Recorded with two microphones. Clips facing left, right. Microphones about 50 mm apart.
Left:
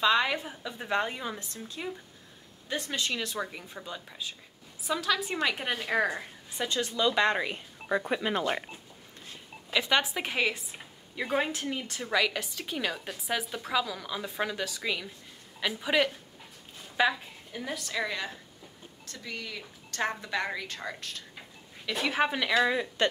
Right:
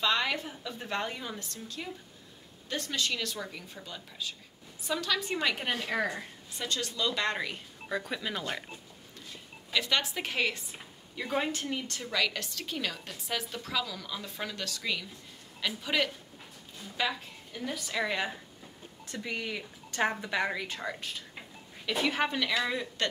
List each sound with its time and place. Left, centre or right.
0.0 s speech: centre
4.8 s a woman's voice: centre
5.9 s a woman's voice: centre; by 8.6 s left
9.7 s a woman's voice: centre
17.7 s a woman's voice: centre
19.0 s a woman's voice: right
21.8 s speech: centre
22.1 s a woman's voice: centre
22.5 s speech: left